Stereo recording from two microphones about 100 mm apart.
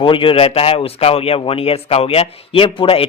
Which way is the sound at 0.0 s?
60° left (ahead or behind).